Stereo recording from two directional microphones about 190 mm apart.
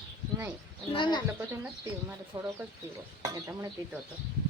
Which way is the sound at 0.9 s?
25° left (ahead or behind).